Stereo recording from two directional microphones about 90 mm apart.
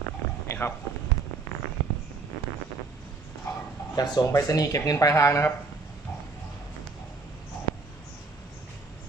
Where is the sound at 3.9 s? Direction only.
50° left (ahead or behind).